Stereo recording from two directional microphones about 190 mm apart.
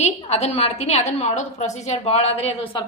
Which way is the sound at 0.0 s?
35° left (ahead or behind).